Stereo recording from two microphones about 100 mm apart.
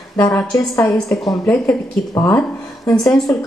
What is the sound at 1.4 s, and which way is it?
Speech, 15° left (ahead or behind).